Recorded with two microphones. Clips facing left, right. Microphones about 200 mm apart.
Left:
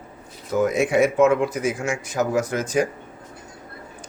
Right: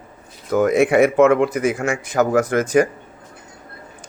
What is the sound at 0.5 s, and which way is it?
A man's voice, 60° right (ahead or behind).